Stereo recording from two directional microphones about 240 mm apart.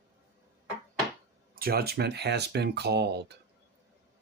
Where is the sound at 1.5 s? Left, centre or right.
Right.